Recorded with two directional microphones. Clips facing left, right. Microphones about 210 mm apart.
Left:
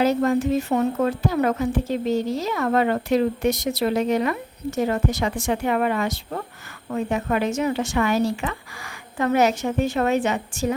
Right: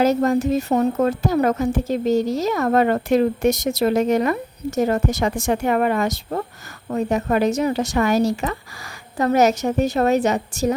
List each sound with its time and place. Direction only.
0.0 s a woman's voice: 40° right (ahead or behind)